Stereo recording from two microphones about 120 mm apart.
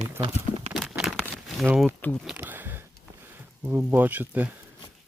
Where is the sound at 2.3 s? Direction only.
15° right (ahead or behind).